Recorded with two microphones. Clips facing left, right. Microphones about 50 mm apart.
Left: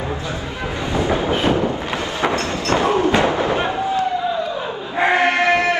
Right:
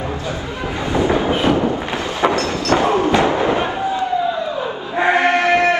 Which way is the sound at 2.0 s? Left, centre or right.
Right.